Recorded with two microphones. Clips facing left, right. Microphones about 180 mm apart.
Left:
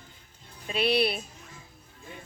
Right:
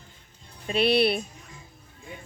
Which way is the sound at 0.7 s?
55° right (ahead or behind).